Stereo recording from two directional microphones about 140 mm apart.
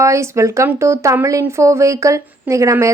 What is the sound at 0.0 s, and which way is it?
Speech, 20° right (ahead or behind).